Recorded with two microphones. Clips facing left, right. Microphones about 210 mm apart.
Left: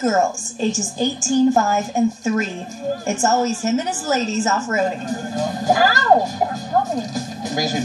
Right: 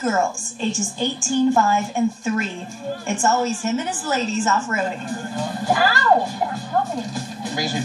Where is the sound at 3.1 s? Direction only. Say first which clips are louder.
Left 1 dB; 40° left (ahead or behind).